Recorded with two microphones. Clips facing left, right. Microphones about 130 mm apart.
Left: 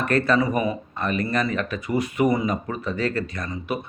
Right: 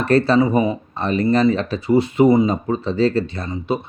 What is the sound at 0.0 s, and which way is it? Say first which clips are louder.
Speech: right 5 dB; 30° right (ahead or behind).